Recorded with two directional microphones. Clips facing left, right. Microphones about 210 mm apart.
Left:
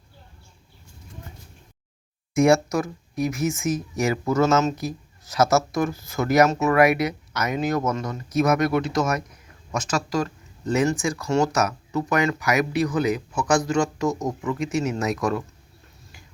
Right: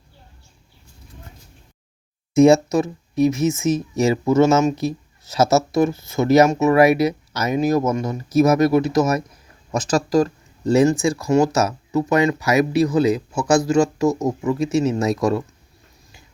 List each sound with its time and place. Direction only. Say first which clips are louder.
2.3 s speech: right 5 dB; 25° right (ahead or behind)